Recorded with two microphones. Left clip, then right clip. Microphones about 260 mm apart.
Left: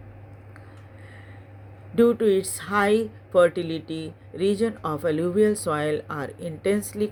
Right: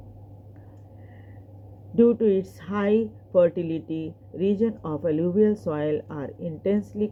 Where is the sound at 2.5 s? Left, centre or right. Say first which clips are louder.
Left 3 dB; left.